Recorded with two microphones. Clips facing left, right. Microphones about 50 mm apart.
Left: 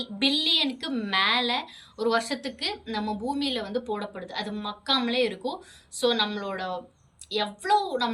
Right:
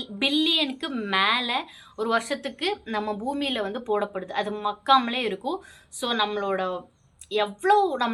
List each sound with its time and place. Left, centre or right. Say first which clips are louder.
0.0 s a woman's voice: right 2 dB; right